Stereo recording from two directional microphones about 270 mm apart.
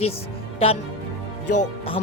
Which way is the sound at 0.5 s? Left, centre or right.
Left.